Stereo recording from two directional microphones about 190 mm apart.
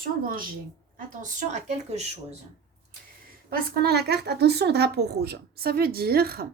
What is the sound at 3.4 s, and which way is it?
A woman's voice, 55° right (ahead or behind).